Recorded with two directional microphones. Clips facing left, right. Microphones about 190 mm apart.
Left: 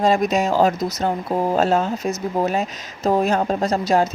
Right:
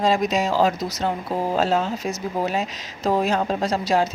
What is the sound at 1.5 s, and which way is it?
Speech, 50° left (ahead or behind).